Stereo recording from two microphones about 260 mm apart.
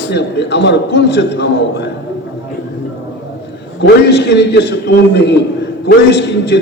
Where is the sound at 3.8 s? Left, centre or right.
Left.